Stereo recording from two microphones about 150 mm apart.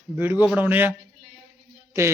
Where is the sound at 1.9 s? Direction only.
20° right (ahead or behind).